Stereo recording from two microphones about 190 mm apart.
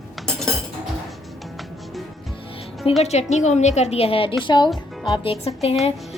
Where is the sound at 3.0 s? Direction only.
35° left (ahead or behind).